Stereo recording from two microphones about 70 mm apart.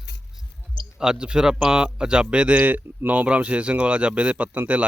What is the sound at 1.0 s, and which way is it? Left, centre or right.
Speech, centre.